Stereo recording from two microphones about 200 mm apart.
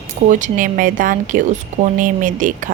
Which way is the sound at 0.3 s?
40° right (ahead or behind).